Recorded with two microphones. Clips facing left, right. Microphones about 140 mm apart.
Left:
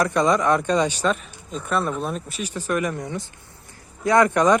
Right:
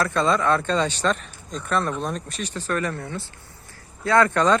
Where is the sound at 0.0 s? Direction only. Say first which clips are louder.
Left 2 dB; 15° left (ahead or behind).